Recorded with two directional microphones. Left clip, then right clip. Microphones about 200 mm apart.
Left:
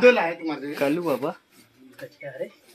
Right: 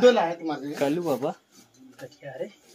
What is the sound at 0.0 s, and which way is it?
Speech, 25° right (ahead or behind).